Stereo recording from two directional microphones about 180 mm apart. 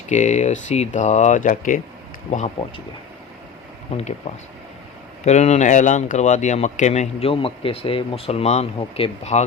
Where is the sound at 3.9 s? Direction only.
35° left (ahead or behind).